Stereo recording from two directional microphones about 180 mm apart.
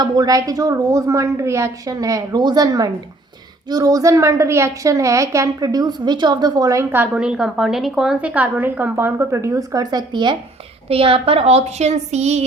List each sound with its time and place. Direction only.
0.0 s a woman's voice: 20° right (ahead or behind); by 12.5 s 40° right (ahead or behind)